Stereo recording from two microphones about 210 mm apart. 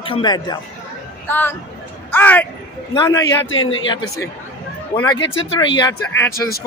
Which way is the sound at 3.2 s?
65° left (ahead or behind).